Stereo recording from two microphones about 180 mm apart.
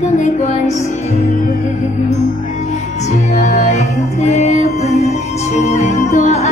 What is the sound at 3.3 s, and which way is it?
Music, 40° left (ahead or behind).